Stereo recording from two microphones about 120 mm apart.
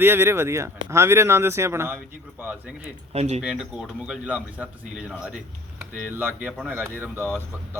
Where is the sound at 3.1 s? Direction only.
65° right (ahead or behind).